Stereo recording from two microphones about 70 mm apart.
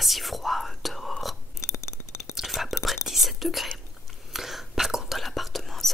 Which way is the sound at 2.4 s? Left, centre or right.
Centre.